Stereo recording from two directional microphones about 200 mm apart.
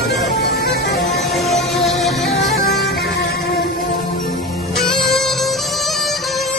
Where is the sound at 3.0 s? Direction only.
50° left (ahead or behind).